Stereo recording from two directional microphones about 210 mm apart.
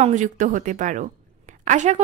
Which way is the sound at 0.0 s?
35° right (ahead or behind).